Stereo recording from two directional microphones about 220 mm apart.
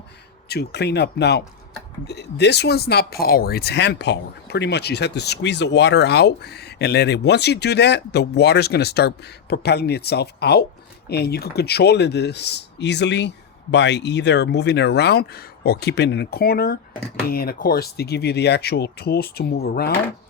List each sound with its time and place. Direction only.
0.4 s speech: 45° left (ahead or behind)